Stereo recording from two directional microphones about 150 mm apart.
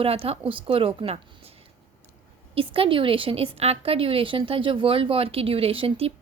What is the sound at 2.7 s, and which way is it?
A woman's voice, 35° right (ahead or behind).